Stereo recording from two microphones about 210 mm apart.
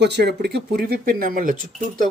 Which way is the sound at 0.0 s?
55° right (ahead or behind).